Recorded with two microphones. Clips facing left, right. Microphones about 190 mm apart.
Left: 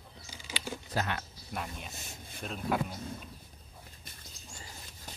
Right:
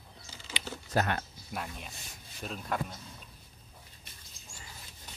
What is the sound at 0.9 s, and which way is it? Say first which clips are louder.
Speech: right 5 dB; 50° right (ahead or behind).